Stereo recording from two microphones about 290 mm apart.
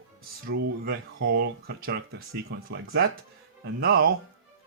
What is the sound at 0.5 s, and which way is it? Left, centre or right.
Speech, right.